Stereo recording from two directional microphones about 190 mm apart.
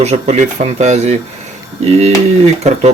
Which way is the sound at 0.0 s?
35° right (ahead or behind).